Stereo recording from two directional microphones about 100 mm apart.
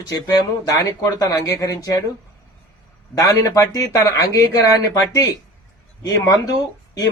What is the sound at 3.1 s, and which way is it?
Speech, 35° left (ahead or behind).